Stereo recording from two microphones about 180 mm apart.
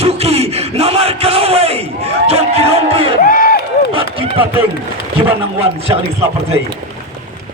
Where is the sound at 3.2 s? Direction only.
50° left (ahead or behind).